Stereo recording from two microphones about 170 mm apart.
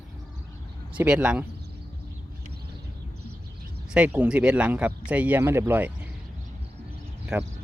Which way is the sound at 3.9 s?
5° right (ahead or behind).